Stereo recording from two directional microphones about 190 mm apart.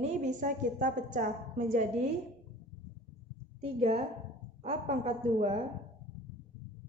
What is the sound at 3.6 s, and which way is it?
A woman's voice, 35° right (ahead or behind).